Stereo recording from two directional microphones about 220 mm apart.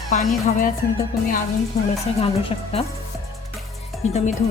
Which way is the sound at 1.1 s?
40° left (ahead or behind).